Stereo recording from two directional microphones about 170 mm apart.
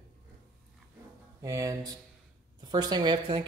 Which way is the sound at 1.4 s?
20° right (ahead or behind).